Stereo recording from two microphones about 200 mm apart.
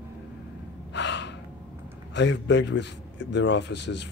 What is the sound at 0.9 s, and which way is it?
Gasp, 60° left (ahead or behind).